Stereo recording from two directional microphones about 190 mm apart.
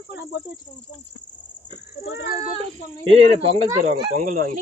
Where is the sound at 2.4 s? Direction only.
30° right (ahead or behind).